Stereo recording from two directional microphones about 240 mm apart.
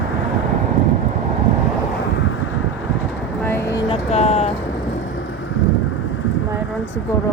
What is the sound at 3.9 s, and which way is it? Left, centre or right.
Speech, left.